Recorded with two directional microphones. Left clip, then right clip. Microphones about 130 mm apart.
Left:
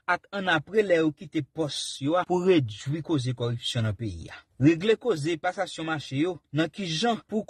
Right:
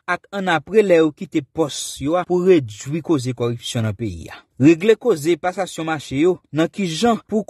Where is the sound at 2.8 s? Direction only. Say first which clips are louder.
Right 9 dB; 40° right (ahead or behind).